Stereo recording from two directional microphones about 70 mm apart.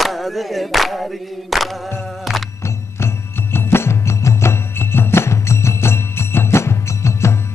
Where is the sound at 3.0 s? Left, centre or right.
Left.